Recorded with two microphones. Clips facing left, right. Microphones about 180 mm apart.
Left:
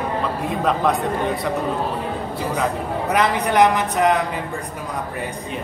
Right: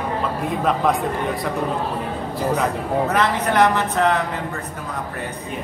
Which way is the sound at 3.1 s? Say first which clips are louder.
Left 5 dB; 15° left (ahead or behind).